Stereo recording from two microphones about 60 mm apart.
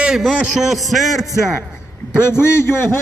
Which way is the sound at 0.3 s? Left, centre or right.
Centre.